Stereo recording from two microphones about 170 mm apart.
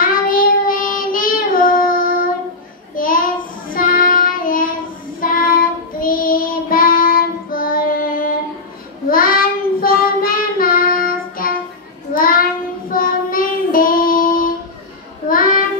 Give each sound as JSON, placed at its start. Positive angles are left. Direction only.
{"t": 0.0, "sound": "child singing", "side_deg": 55}
{"t": 3.0, "sound": "a sound", "side_deg": 55}
{"t": 3.7, "sound": "child singing", "side_deg": 55}